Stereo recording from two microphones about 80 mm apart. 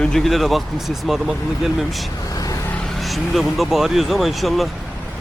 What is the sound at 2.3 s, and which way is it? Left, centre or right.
Vehicle, left.